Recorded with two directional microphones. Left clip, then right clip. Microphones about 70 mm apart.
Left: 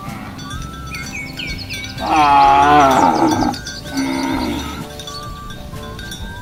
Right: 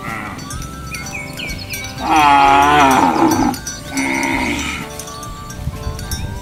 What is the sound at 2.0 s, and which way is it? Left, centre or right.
Music, centre.